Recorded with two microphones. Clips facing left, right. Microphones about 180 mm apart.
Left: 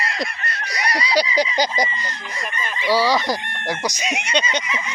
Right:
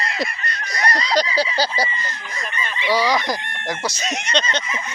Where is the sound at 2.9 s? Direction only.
15° right (ahead or behind).